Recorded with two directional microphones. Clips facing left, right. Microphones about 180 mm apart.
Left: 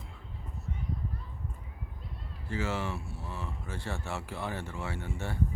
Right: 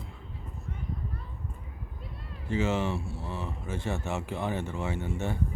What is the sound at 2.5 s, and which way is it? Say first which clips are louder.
Speech: right 5 dB; 25° right (ahead or behind).